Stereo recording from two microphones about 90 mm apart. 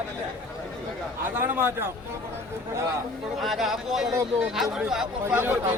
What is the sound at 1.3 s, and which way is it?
Speech, 25° right (ahead or behind).